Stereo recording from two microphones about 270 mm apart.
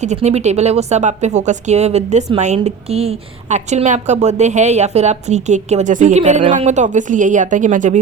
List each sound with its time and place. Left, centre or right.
0.0 s speech: right